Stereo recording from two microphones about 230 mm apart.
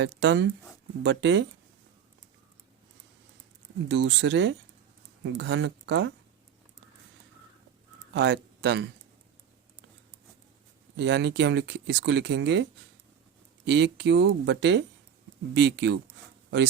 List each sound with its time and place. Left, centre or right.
0.0 s speech: right
3.8 s speech: right
8.1 s speech: right
10.9 s speech: right
13.7 s speech: right